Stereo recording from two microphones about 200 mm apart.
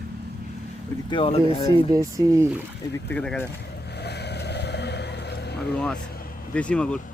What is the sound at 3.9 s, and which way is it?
Vehicle, 55° left (ahead or behind).